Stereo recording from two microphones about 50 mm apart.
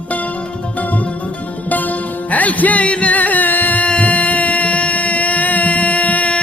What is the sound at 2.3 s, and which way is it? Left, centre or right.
Music, left.